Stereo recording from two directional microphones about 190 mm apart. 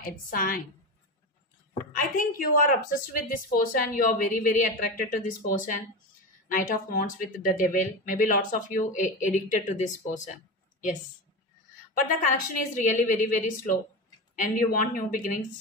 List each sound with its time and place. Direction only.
0.0 s speech: 50° left (ahead or behind)
2.0 s speech: 45° left (ahead or behind)
11.9 s speech: 45° left (ahead or behind)